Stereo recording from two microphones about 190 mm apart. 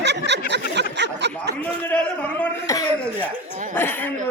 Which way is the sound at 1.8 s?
5° left (ahead or behind).